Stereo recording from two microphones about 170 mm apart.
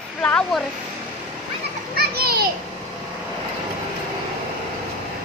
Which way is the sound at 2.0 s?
65° right (ahead or behind).